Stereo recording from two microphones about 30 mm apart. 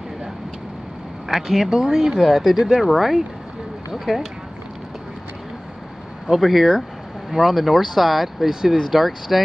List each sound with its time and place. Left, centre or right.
1.3 s speech: centre
1.7 s speech: centre
2.1 s speech: centre
6.3 s speech: centre
8.5 s speech: centre
8.9 s speech: centre